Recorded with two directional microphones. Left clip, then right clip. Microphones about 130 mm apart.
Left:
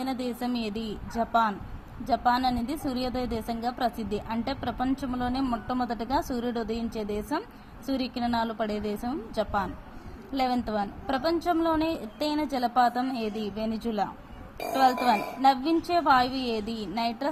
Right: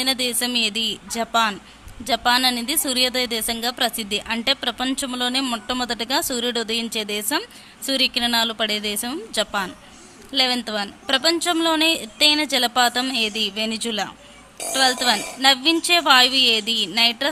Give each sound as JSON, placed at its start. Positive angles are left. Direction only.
{"t": 0.0, "sound": "a woman's voice", "side_deg": -15}
{"t": 6.1, "sound": "speech", "side_deg": -50}
{"t": 6.3, "sound": "a woman's voice", "side_deg": -15}
{"t": 8.2, "sound": "speech", "side_deg": -50}
{"t": 8.4, "sound": "a woman's voice", "side_deg": -15}
{"t": 10.3, "sound": "a woman's voice", "side_deg": -10}